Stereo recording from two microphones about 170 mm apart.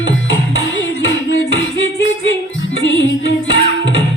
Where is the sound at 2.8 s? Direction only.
90° left.